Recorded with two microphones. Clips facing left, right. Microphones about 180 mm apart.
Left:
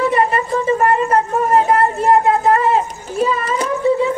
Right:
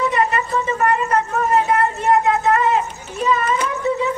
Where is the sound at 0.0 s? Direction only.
30° left (ahead or behind).